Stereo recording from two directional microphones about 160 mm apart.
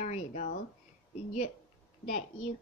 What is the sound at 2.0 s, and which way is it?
Speech, 45° left (ahead or behind).